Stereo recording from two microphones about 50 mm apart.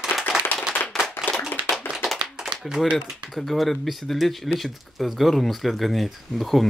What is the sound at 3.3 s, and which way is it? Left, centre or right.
Speech, centre.